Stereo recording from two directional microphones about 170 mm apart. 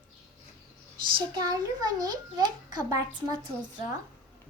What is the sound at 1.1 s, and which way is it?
A child's voice, 25° right (ahead or behind).